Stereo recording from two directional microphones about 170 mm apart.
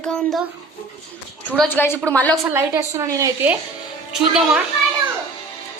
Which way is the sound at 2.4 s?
15° right (ahead or behind).